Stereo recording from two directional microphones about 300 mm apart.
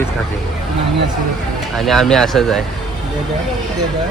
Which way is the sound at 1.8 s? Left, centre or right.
Centre.